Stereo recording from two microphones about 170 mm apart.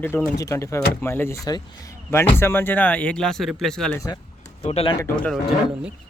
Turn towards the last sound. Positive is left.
turn(degrees=0)  # may be behind; listen again after turning